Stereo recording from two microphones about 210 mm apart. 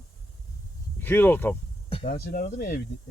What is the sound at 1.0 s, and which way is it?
Speech, 10° left (ahead or behind).